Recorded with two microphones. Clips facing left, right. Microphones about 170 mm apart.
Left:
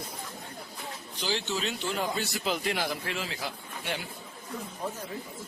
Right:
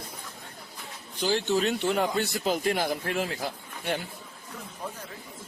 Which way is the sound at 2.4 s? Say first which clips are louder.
Right 4 dB; 45° right (ahead or behind).